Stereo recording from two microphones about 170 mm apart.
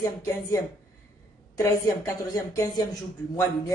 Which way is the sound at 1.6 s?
15° left (ahead or behind).